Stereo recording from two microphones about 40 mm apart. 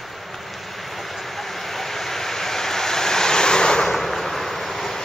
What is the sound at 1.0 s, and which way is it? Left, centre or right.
Vehicle, centre.